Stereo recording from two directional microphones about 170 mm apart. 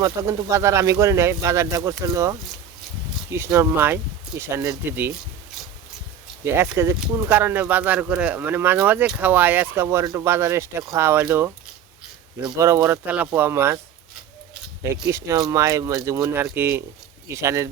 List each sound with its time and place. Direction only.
0.0 s speech: 20° right (ahead or behind)
6.4 s speech: 15° right (ahead or behind)
12.5 s speech: 15° right (ahead or behind)
14.8 s speech: 20° right (ahead or behind)